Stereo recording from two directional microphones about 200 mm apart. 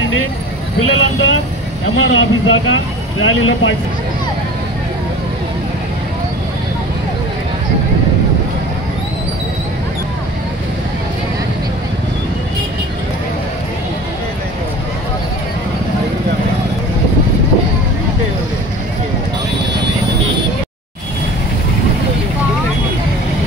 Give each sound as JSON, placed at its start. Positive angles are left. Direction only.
{"t": 0.7, "sound": "speech", "side_deg": 90}
{"t": 2.0, "sound": "speech", "side_deg": 70}